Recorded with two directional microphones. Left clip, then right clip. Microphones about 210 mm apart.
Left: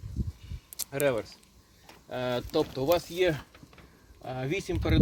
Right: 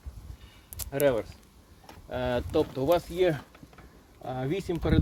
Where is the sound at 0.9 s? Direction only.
15° left (ahead or behind).